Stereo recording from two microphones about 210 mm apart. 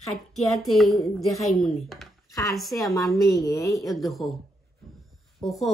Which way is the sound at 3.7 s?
Centre (ahead or behind).